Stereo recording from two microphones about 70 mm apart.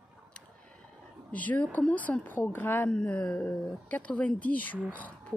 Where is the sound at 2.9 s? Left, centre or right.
Centre.